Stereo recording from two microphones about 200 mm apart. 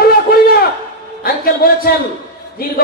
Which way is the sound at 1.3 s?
50° left (ahead or behind).